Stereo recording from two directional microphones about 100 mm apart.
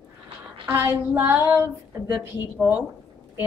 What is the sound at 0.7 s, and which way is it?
Child singing, 20° right (ahead or behind).